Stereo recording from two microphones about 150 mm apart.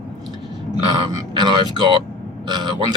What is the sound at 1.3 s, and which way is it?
Speech, 30° right (ahead or behind).